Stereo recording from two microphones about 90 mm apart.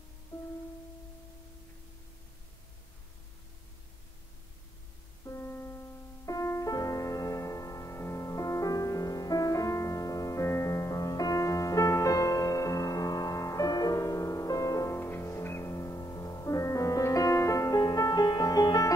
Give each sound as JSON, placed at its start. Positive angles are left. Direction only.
{"t": 0.3, "sound": "music", "side_deg": 20}
{"t": 5.2, "sound": "music", "side_deg": 30}
{"t": 15.0, "sound": "music", "side_deg": 25}